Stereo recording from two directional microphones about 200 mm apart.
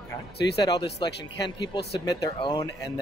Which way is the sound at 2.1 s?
20° left (ahead or behind).